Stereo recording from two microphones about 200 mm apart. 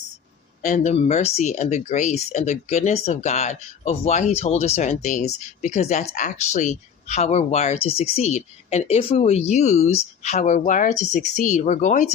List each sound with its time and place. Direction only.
0.6 s speech: 35° left (ahead or behind)